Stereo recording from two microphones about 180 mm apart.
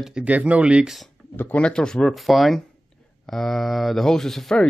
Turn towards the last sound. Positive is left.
turn(degrees=5)  # may be behind; listen again after turning